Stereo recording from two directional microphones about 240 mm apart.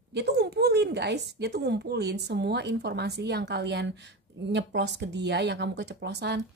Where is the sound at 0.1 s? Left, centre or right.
Right.